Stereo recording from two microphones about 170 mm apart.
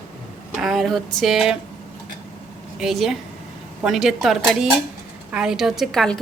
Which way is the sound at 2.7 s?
Centre (ahead or behind).